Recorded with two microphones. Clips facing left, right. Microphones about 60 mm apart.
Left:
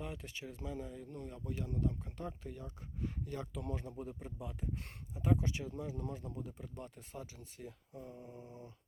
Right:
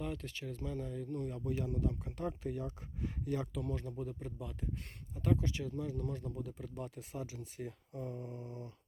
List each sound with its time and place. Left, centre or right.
0.0 s speech: centre
3.8 s speech: centre
6.5 s speech: centre
8.1 s speech: centre